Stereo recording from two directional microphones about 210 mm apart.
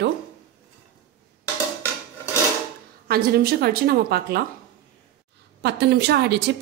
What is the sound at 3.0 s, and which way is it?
A woman's voice, 45° right (ahead or behind).